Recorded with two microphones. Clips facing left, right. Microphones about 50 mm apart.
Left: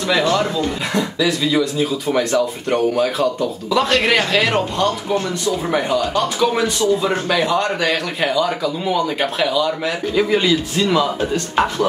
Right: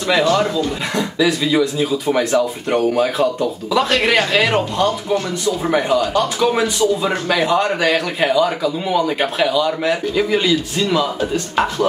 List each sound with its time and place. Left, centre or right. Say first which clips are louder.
0.9 s a man's voice: right 2 dB; centre
6.8 s a man's voice: even; centre